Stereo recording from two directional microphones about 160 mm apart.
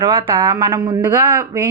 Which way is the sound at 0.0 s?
25° right (ahead or behind).